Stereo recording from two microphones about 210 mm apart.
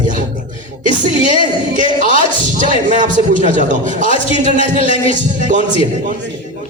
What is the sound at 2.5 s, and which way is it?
A man's voice, 40° right (ahead or behind).